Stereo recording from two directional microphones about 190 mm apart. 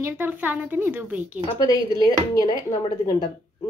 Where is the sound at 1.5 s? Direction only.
20° left (ahead or behind).